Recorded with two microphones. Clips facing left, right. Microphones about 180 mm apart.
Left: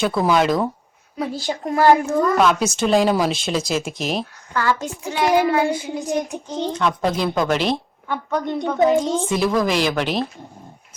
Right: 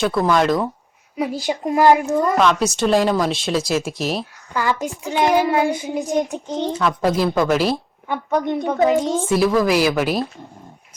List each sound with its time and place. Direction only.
0.0 s speech: centre (ahead or behind)
1.1 s a woman's voice: 10° right (ahead or behind)
2.4 s speech: centre (ahead or behind)
4.5 s a child's voice: 15° right (ahead or behind)
6.7 s speech: 5° right (ahead or behind)
8.0 s a woman's voice: 15° right (ahead or behind)
9.2 s speech: centre (ahead or behind)